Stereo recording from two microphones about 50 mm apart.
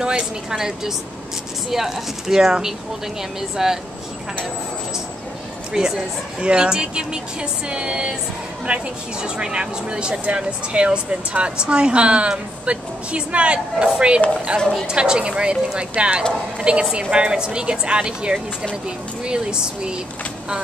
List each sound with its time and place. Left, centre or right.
0.0 s speech: centre
5.7 s speech: centre
8.7 s speech: right
9.2 s speech: centre